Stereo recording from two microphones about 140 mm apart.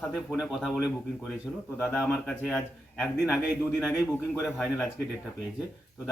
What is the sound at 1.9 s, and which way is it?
Speech, centre (ahead or behind).